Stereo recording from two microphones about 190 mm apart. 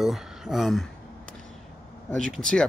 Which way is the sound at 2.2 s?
5° left (ahead or behind).